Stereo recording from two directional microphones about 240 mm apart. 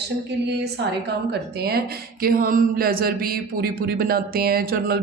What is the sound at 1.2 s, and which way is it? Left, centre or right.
Speech, right.